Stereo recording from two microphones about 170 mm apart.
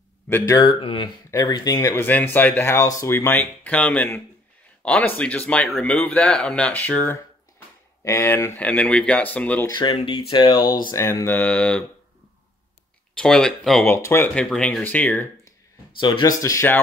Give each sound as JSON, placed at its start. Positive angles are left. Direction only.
{"t": 0.6, "sound": "speech", "side_deg": 30}
{"t": 9.7, "sound": "speech", "side_deg": 25}
{"t": 13.1, "sound": "speech", "side_deg": 5}
{"t": 13.9, "sound": "speech", "side_deg": 15}
{"t": 16.0, "sound": "speech", "side_deg": 25}